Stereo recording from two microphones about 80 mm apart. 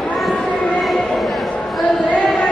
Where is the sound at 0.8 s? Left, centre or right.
Centre.